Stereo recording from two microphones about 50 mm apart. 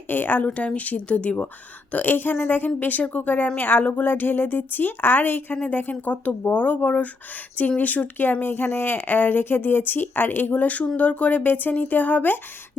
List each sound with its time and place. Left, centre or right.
0.1 s speech: left
0.4 s speech: left